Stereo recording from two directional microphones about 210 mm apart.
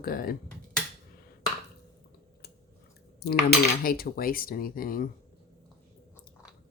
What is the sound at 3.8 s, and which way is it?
Speech, 45° left (ahead or behind).